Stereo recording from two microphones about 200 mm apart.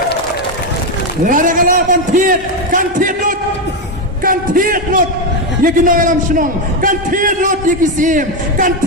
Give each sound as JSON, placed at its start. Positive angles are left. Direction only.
{"t": 1.2, "sound": "a man's voice", "side_deg": -40}